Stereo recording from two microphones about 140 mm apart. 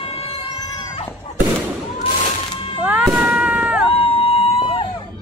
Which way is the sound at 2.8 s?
10° right (ahead or behind).